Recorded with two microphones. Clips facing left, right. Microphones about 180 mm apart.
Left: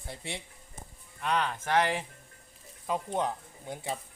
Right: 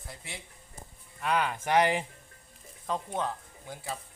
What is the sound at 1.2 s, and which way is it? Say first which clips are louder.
Speech: right 1 dB; 5° right (ahead or behind).